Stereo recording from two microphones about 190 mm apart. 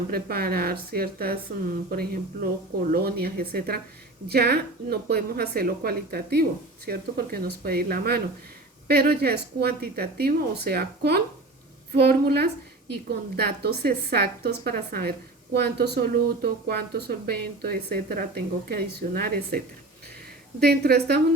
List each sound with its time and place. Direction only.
0.1 s a woman's voice: 55° right (ahead or behind)